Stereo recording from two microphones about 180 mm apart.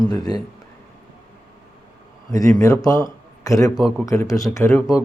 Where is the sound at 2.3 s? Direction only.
20° left (ahead or behind).